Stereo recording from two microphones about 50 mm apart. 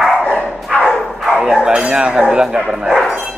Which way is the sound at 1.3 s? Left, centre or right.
Centre.